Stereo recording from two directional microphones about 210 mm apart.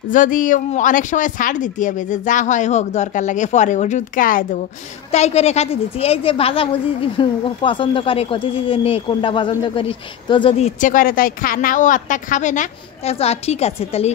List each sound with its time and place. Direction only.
0.1 s a woman's voice: 40° left (ahead or behind)